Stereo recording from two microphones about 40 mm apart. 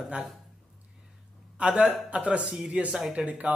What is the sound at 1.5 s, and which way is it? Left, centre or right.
A man's voice, right.